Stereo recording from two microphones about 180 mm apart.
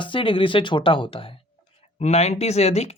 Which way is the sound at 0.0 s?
30° left (ahead or behind).